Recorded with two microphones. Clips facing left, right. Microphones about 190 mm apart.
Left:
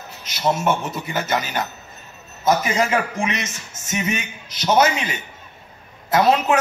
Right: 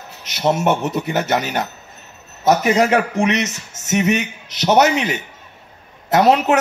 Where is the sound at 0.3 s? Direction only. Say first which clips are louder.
Right 3 dB; 70° right (ahead or behind).